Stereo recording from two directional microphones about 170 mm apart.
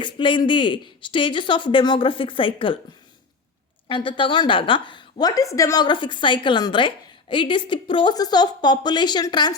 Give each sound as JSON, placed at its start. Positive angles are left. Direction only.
{"t": 0.0, "sound": "a woman's voice", "side_deg": 30}
{"t": 3.8, "sound": "a woman's voice", "side_deg": 30}